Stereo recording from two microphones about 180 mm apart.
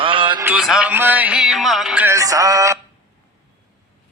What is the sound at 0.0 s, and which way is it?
Music, 30° right (ahead or behind).